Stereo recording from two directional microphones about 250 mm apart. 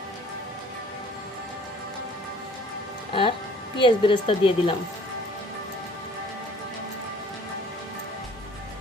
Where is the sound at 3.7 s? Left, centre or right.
Centre.